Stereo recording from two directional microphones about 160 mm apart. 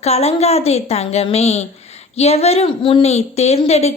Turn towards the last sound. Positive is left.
turn(degrees=40)  # may be behind; listen again after turning